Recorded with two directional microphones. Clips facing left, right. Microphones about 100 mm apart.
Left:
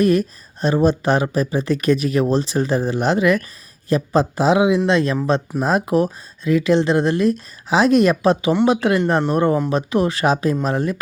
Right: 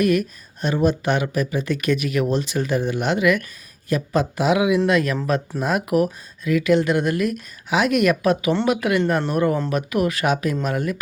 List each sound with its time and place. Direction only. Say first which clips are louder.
0.0 s speech: left 3 dB; 35° left (ahead or behind)